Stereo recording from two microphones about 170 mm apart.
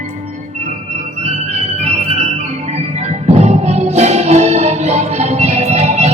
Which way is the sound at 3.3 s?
40° right (ahead or behind).